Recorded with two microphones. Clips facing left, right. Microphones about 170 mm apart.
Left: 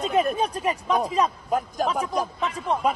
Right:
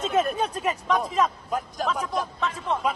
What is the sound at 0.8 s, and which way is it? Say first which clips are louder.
A man's voice: left 1 dB; 40° left (ahead or behind).